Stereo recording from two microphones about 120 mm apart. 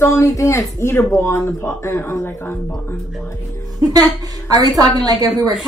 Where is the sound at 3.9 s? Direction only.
30° right (ahead or behind).